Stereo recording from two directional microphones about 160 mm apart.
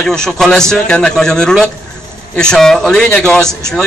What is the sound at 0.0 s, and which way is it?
A man's voice, 5° left (ahead or behind).